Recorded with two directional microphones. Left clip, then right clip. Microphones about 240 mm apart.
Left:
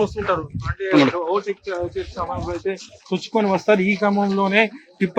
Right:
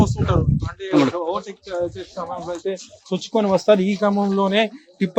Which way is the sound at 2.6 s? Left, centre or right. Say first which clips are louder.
Even; right.